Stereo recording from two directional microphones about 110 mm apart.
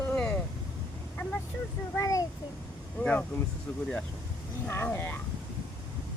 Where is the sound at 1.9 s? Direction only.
30° left (ahead or behind).